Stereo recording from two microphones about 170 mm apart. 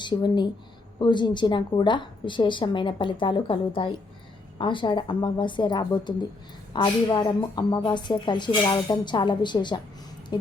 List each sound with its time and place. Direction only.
0.0 s a woman's voice: 25° left (ahead or behind)